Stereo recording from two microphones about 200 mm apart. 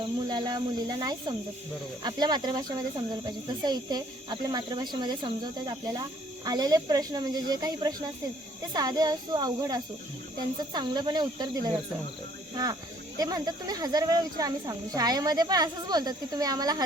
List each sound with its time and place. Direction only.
0.0 s speech: 20° right (ahead or behind)
13.1 s speech: 20° right (ahead or behind)